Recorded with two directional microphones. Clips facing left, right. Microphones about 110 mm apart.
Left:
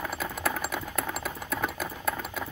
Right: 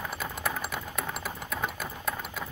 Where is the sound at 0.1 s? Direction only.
5° left (ahead or behind).